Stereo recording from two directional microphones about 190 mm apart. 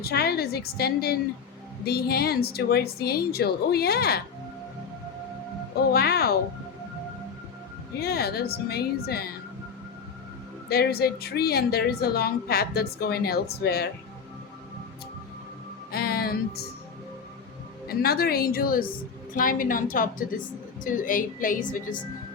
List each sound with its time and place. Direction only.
0.0 s a woman's voice: 55° left (ahead or behind)
5.9 s a woman's voice: 55° left (ahead or behind)
8.0 s a woman's voice: 55° left (ahead or behind)
10.7 s a woman's voice: 55° left (ahead or behind)
15.9 s music: 55° left (ahead or behind)
17.8 s a woman's voice: 55° left (ahead or behind)